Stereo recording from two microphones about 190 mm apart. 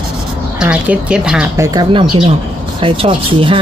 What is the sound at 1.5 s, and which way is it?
A man's voice, 15° right (ahead or behind).